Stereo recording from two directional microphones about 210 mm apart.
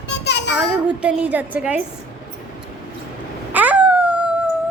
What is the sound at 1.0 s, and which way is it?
Speech, 5° right (ahead or behind).